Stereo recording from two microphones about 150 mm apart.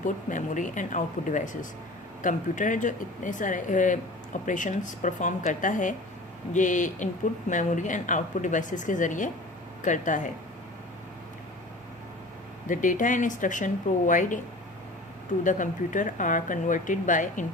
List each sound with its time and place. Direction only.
0.0 s speech: 60° left (ahead or behind)
12.6 s speech: 60° left (ahead or behind)
15.4 s speech: 60° left (ahead or behind)